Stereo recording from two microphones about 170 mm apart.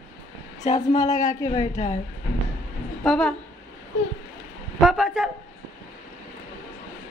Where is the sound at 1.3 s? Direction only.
20° left (ahead or behind).